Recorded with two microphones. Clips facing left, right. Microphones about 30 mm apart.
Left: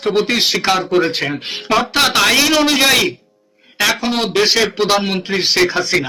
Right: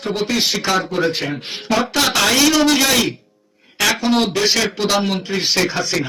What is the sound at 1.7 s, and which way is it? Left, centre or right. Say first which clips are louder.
Speech: left 3 dB; left.